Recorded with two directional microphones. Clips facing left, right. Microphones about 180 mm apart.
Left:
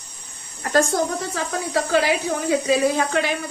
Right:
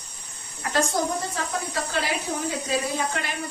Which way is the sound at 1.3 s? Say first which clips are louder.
Left 5 dB; 90° left.